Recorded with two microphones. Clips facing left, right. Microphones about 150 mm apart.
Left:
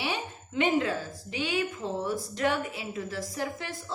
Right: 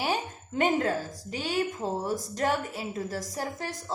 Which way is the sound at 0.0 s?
45° right (ahead or behind).